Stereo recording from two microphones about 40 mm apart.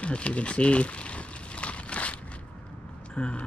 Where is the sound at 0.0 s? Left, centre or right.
Left.